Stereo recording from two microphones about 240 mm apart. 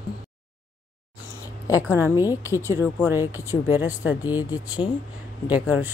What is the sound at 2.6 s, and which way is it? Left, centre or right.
Speech, centre.